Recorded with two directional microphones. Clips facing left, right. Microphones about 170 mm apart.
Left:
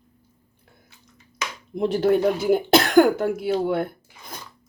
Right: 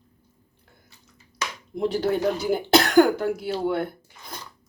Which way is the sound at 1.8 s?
55° left (ahead or behind).